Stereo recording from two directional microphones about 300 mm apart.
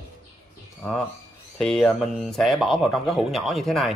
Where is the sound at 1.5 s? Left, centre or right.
Centre.